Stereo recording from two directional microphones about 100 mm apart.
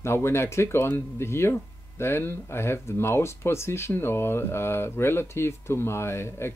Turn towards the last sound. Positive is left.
turn(degrees=25)  # may be behind; listen again after turning